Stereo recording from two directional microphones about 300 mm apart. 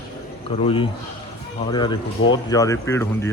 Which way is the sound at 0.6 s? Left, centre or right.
Centre.